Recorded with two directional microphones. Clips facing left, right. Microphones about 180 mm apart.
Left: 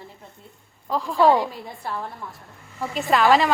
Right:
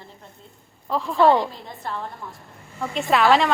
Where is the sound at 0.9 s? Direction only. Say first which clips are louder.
Right 1 dB; centre (ahead or behind).